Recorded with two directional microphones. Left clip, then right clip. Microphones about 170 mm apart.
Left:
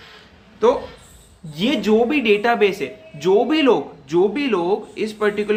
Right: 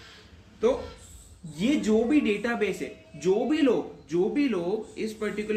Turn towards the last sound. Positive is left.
turn(degrees=20)  # may be behind; listen again after turning